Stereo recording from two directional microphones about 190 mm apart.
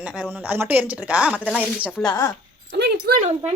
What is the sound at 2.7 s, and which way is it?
Speech, 60° right (ahead or behind).